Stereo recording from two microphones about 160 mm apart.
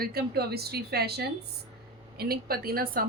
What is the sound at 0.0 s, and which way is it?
Speech, 75° right (ahead or behind).